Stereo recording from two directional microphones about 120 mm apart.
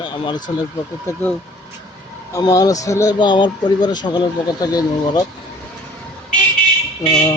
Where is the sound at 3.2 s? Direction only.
40° left (ahead or behind).